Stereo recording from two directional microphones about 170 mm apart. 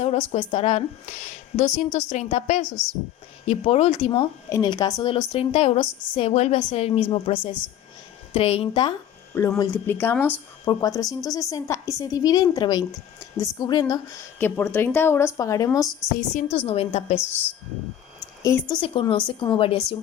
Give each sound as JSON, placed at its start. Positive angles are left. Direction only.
{"t": 0.0, "sound": "a woman's voice", "side_deg": 40}
{"t": 4.4, "sound": "a woman's voice", "side_deg": 20}
{"t": 9.3, "sound": "speech", "side_deg": 15}
{"t": 10.7, "sound": "a woman's voice", "side_deg": 20}
{"t": 14.3, "sound": "speech", "side_deg": 10}
{"t": 16.1, "sound": "a woman's voice", "side_deg": 45}
{"t": 18.7, "sound": "a woman's voice", "side_deg": 30}